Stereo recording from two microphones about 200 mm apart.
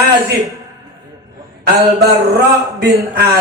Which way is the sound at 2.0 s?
55° right (ahead or behind).